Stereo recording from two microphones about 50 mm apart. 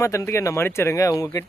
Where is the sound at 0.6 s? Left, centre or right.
Left.